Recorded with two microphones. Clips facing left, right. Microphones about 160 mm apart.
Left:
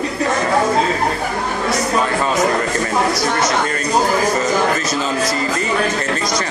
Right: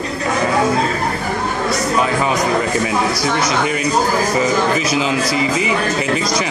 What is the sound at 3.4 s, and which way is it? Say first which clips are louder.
Speech: right 1 dB; 10° right (ahead or behind).